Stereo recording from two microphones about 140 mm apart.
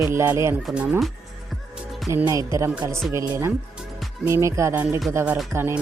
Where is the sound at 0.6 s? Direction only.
10° right (ahead or behind).